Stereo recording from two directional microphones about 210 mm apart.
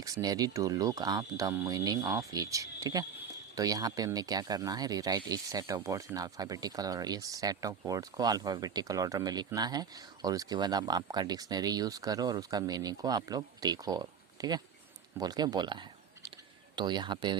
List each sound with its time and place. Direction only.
0.0 s speech: 15° right (ahead or behind)